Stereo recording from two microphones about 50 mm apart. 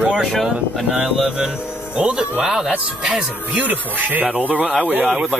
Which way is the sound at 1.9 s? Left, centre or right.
Right.